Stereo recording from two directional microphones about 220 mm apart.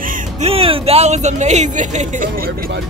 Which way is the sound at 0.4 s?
25° right (ahead or behind).